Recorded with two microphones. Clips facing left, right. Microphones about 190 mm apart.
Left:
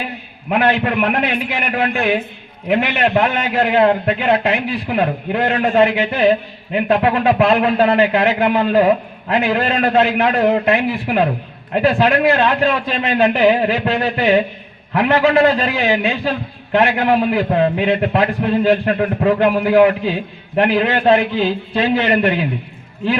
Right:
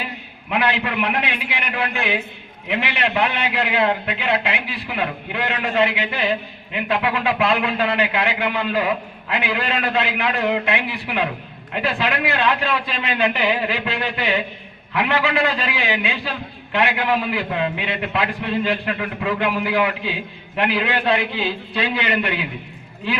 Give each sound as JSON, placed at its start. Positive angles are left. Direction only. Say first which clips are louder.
{"t": 0.4, "sound": "a man's voice", "louder": "left 6 dB", "side_deg": 45}